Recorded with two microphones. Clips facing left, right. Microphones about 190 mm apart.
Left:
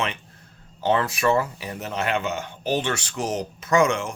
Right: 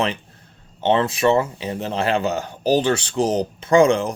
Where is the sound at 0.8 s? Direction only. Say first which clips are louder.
Right 4 dB; 25° right (ahead or behind).